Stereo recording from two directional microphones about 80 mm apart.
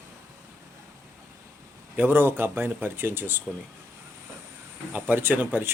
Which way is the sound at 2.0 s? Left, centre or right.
Right.